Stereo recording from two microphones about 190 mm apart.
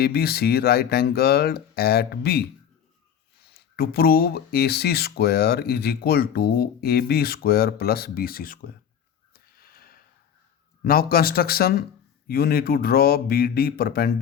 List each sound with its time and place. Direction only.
0.0 s speech: 55° left (ahead or behind)
3.5 s speech: 55° left (ahead or behind)
9.3 s sniff: 50° left (ahead or behind)
10.8 s speech: 50° left (ahead or behind)